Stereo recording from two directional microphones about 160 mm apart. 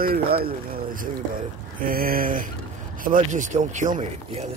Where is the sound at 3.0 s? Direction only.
55° right (ahead or behind).